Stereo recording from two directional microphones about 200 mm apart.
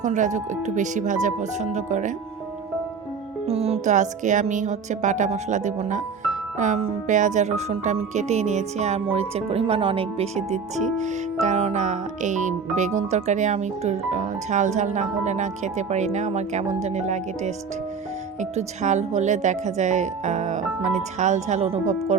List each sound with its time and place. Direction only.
0.0 s speech: 40° right (ahead or behind)
3.4 s speech: 30° right (ahead or behind)